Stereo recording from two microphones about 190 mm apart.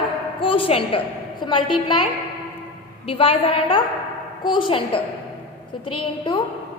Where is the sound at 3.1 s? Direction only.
30° left (ahead or behind).